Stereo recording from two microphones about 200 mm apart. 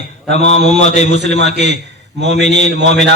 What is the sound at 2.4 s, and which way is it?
Speech, 35° left (ahead or behind).